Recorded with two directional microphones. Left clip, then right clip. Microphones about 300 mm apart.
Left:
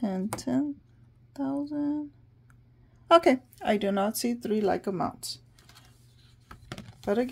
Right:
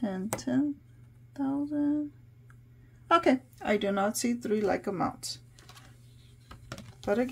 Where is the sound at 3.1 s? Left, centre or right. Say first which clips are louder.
Left 4 dB; left.